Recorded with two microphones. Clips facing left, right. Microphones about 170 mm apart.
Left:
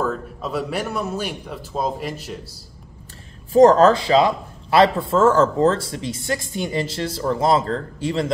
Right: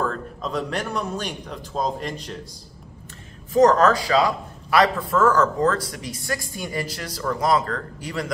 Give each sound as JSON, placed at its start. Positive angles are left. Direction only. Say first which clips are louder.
{"t": 0.0, "sound": "speech", "louder": "left 2 dB", "side_deg": 5}
{"t": 3.5, "sound": "a man's voice", "louder": "left 4 dB", "side_deg": 30}